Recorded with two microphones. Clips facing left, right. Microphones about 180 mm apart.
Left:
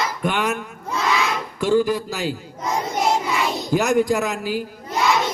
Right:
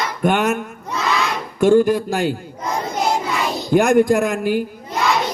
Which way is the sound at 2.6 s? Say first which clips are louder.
Even; centre (ahead or behind).